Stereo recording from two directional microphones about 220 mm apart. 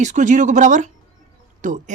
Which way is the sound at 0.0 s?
35° right (ahead or behind).